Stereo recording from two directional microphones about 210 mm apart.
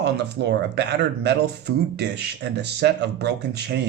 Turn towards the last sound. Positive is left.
turn(degrees=-50)  # may be behind; listen again after turning